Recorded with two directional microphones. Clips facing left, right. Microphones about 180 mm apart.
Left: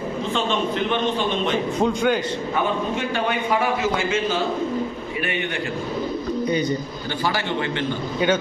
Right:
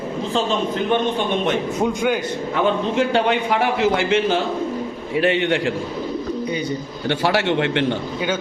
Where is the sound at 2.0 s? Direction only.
10° right (ahead or behind).